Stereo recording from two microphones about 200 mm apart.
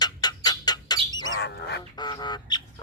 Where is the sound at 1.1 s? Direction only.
75° left (ahead or behind); by 1.8 s 55° left (ahead or behind).